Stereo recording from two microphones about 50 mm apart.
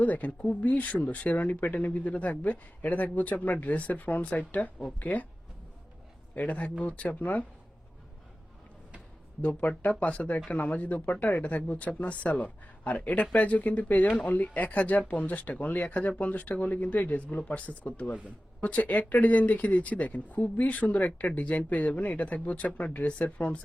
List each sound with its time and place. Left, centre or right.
0.0 s speech: left
6.4 s speech: left
10.0 s speech: left